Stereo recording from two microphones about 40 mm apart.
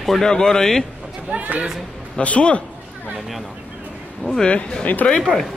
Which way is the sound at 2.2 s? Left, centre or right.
Left.